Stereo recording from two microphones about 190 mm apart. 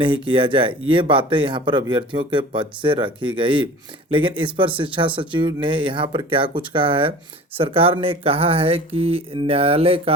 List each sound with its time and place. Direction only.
0.0 s speech: 25° right (ahead or behind)